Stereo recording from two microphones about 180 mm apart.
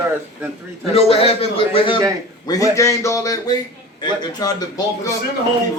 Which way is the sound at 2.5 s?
20° left (ahead or behind).